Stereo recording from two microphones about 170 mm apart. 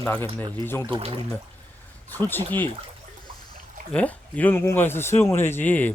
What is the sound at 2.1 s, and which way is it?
Speech, 10° left (ahead or behind).